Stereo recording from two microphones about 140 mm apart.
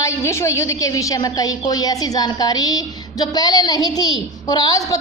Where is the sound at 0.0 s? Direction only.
20° left (ahead or behind).